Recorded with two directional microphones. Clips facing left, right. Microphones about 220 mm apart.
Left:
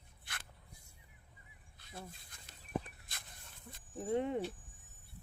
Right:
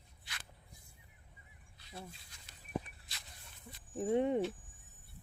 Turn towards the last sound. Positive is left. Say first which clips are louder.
# right 3 dB
turn(degrees=-15)  # may be behind; listen again after turning